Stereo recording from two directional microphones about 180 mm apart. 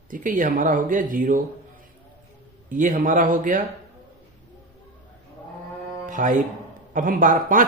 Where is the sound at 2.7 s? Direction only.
45° right (ahead or behind).